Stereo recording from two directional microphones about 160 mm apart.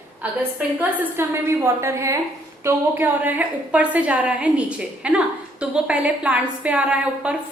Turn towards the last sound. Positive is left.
turn(degrees=-5)  # may be behind; listen again after turning